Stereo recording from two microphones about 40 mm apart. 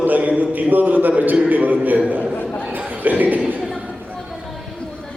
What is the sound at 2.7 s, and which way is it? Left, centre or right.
Chuckle, right.